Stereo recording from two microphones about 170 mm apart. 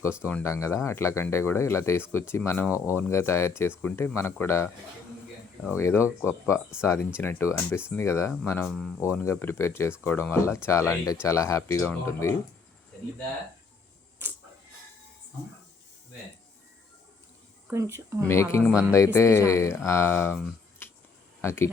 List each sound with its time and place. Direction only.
0.2 s speech: 10° left (ahead or behind)
5.7 s speech: 15° left (ahead or behind)
9.0 s speech: 15° left (ahead or behind)
17.7 s speech: 15° right (ahead or behind)
18.3 s speech: 15° left (ahead or behind)